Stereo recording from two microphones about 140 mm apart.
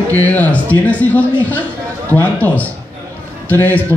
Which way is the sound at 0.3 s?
10° left (ahead or behind).